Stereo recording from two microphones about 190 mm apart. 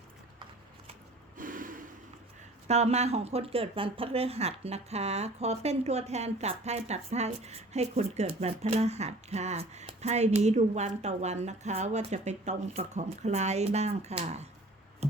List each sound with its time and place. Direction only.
1.4 s snort: 45° right (ahead or behind)
2.6 s speech: 35° right (ahead or behind)